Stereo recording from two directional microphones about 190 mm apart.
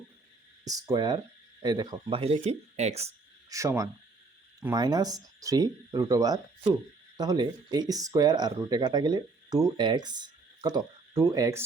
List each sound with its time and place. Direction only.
0.6 s speech: 20° right (ahead or behind); by 3.1 s 35° right (ahead or behind)
3.5 s speech: 15° right (ahead or behind)